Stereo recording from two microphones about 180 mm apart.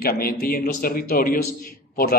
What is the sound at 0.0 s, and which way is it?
A man's voice, 55° left (ahead or behind).